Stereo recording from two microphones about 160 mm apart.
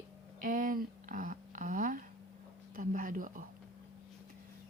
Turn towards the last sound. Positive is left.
turn(degrees=-55)  # may be behind; listen again after turning